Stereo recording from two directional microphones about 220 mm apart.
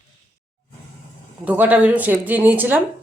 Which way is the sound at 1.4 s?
5° right (ahead or behind).